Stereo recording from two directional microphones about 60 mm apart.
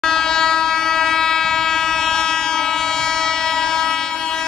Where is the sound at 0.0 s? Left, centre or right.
Centre.